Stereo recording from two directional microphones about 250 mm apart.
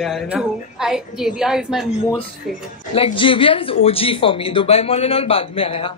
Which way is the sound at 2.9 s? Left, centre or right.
Left.